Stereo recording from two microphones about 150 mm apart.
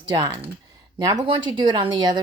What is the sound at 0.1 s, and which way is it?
Speech, 25° right (ahead or behind).